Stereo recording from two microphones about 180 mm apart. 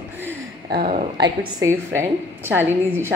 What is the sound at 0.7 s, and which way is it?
Speech, 60° right (ahead or behind).